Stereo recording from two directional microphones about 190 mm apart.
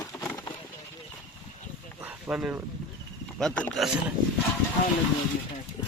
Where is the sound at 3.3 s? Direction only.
5° left (ahead or behind).